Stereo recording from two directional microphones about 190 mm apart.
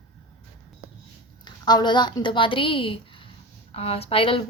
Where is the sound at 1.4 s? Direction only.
25° left (ahead or behind).